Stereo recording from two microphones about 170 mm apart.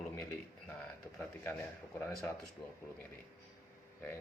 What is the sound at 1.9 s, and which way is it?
Speech, 5° left (ahead or behind).